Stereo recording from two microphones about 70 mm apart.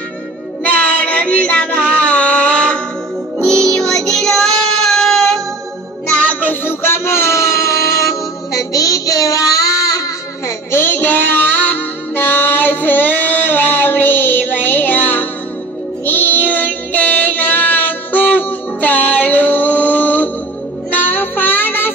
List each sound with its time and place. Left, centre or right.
0.7 s music: centre
3.4 s child singing: centre
6.0 s music: left
10.7 s music: left
16.1 s child singing: left